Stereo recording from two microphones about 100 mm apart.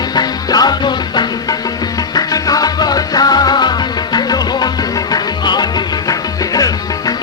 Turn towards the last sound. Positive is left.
turn(degrees=40)  # may be behind; listen again after turning